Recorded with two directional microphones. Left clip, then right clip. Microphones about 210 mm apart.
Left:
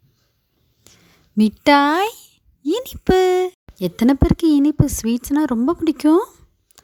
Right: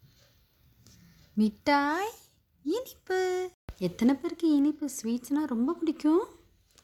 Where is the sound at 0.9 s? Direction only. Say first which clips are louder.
Left 10 dB; 40° left (ahead or behind).